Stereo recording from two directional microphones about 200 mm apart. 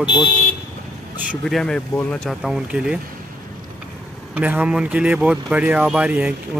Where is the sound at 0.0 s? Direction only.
20° left (ahead or behind).